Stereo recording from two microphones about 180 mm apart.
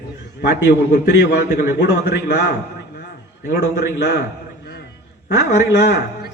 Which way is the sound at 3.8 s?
70° left (ahead or behind).